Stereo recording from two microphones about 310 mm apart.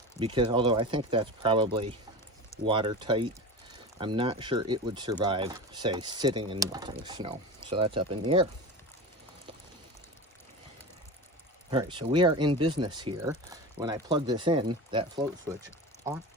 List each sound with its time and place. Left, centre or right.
0.2 s speech: centre
11.7 s speech: centre